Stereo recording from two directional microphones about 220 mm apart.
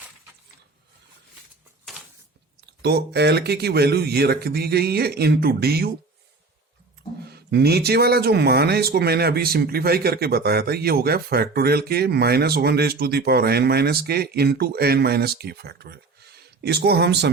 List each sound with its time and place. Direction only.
1.9 s a sound: centre (ahead or behind)
2.6 s speech: 50° right (ahead or behind)
7.3 s speech: 45° right (ahead or behind)